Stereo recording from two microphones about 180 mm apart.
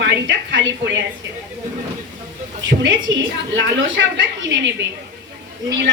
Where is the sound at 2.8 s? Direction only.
90° right.